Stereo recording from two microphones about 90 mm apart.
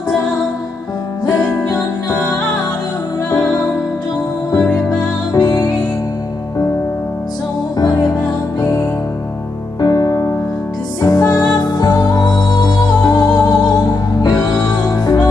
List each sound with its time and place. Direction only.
1.4 s music: 15° left (ahead or behind)
5.3 s music: 45° left (ahead or behind)
8.5 s music: 35° left (ahead or behind)